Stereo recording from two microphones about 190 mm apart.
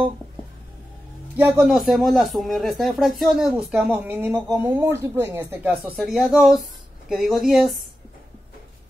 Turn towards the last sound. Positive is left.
turn(degrees=0)  # may be behind; listen again after turning